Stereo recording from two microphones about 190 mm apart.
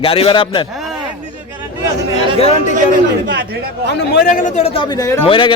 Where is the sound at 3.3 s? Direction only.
50° right (ahead or behind).